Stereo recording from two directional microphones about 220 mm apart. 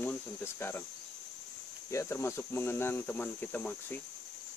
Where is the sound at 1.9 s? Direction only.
10° left (ahead or behind).